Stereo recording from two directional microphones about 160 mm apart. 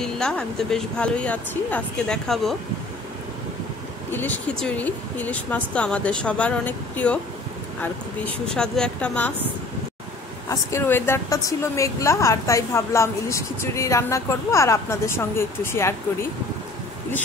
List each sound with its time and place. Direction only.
0.0 s speech: 5° left (ahead or behind)
4.1 s a woman's voice: 10° left (ahead or behind)
8.5 s speech: 5° left (ahead or behind)
10.5 s a woman's voice: 15° left (ahead or behind)